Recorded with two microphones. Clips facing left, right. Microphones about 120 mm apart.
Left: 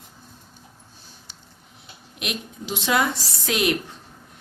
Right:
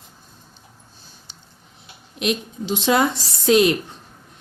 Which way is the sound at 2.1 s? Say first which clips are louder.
Right 8 dB; 30° right (ahead or behind).